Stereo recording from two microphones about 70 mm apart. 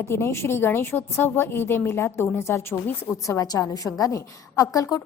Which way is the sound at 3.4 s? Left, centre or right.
Left.